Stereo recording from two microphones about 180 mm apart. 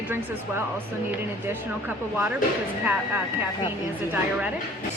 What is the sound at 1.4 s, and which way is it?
Speech, 10° right (ahead or behind).